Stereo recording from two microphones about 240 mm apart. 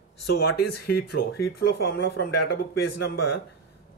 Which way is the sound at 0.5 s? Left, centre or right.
Left.